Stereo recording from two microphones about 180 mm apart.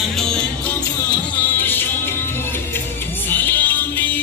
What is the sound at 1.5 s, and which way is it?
Music, 10° left (ahead or behind).